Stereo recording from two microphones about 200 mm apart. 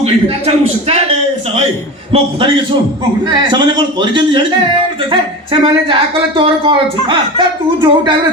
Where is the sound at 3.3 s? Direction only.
20° right (ahead or behind).